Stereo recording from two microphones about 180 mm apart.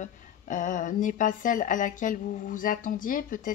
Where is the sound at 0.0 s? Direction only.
45° left (ahead or behind).